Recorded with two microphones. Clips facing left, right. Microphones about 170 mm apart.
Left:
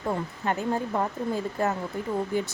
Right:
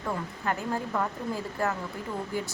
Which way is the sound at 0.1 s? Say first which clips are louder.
Left 3 dB; 25° left (ahead or behind).